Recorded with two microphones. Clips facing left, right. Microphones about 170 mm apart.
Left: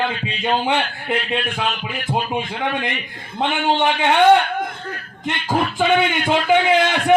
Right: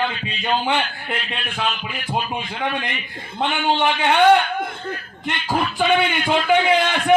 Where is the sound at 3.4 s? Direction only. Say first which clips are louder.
Left 1 dB; 20° left (ahead or behind).